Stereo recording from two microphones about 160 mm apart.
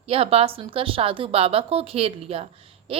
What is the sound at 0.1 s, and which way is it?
A woman's voice, 35° right (ahead or behind).